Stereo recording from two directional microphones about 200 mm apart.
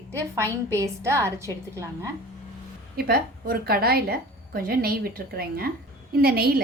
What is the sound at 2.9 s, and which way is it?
A woman's voice, 50° right (ahead or behind).